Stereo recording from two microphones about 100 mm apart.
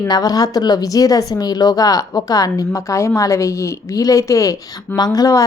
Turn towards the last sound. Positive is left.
turn(degrees=40)  # may be behind; listen again after turning